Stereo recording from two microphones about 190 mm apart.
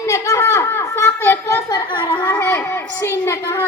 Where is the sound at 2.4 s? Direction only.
10° left (ahead or behind).